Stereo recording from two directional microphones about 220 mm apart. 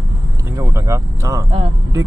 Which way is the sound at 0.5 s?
15° right (ahead or behind).